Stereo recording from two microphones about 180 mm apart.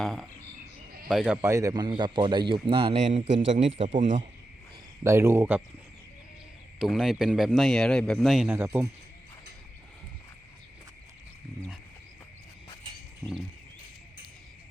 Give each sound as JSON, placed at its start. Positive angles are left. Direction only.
{"t": 0.0, "sound": "a man's voice", "side_deg": 0}
{"t": 1.4, "sound": "a man's voice", "side_deg": -15}
{"t": 5.0, "sound": "speech", "side_deg": -15}
{"t": 6.7, "sound": "a man's voice", "side_deg": 0}
{"t": 8.4, "sound": "speech", "side_deg": -10}